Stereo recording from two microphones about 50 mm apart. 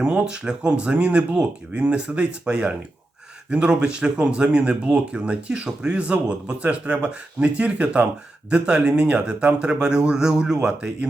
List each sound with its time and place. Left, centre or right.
0.0 s speech: right